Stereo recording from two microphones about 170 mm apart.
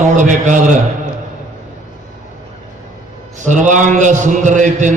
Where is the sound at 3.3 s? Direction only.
45° right (ahead or behind).